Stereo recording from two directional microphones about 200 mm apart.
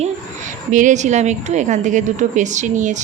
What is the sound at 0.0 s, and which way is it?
A woman's voice, 40° right (ahead or behind).